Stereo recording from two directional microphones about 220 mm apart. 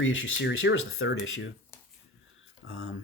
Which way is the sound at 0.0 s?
60° left (ahead or behind).